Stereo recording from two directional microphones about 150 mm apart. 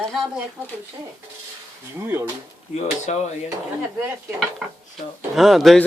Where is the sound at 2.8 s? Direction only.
50° left (ahead or behind).